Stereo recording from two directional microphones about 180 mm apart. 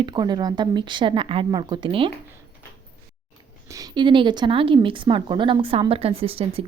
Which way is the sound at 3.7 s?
25° right (ahead or behind).